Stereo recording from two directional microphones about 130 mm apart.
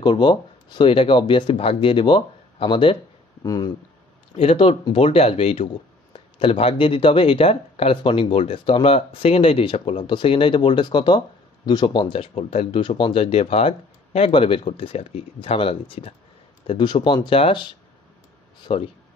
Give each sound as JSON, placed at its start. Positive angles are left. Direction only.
{"t": 0.0, "sound": "speech", "side_deg": 35}
{"t": 3.4, "sound": "speech", "side_deg": 30}
{"t": 4.4, "sound": "speech", "side_deg": 45}
{"t": 16.6, "sound": "speech", "side_deg": 35}